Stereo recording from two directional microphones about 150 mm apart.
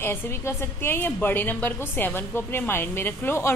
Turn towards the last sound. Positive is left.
turn(degrees=15)  # may be behind; listen again after turning